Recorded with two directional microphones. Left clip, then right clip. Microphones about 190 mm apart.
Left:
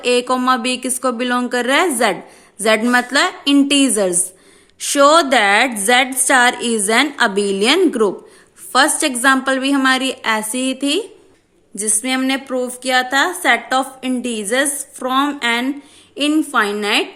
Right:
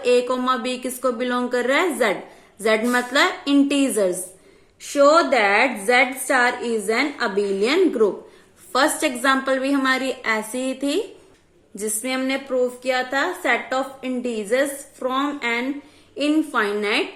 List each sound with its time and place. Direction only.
0.0 s a woman's voice: 35° left (ahead or behind)
4.8 s a woman's voice: 50° left (ahead or behind)